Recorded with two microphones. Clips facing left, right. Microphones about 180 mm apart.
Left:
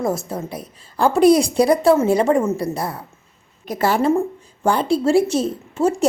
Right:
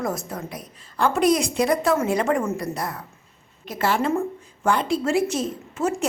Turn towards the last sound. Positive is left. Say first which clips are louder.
# left 7 dB
turn(degrees=30)  # may be behind; listen again after turning